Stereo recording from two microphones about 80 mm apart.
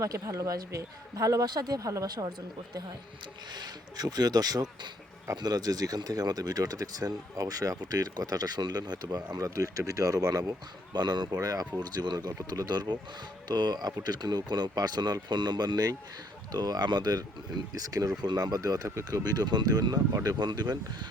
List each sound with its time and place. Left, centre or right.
0.0 s speech: right
3.5 s speech: right
10.9 s speech: right
11.3 s speech: right
11.8 s speech: right
19.2 s speech: right